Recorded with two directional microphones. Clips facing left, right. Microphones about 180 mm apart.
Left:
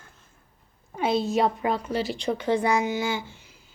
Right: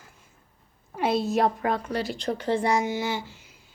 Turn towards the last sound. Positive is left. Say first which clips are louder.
# left 1 dB
turn(degrees=0)  # may be behind; listen again after turning